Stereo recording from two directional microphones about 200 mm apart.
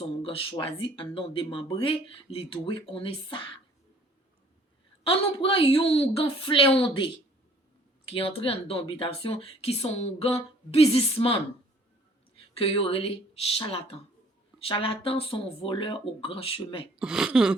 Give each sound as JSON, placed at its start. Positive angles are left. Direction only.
{"t": 0.2, "sound": "speech", "side_deg": 25}
{"t": 5.0, "sound": "speech", "side_deg": 25}
{"t": 8.1, "sound": "speech", "side_deg": 25}
{"t": 12.5, "sound": "speech", "side_deg": 25}
{"t": 17.0, "sound": "speech", "side_deg": -5}